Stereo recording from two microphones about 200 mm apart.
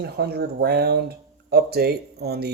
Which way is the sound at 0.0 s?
55° right (ahead or behind).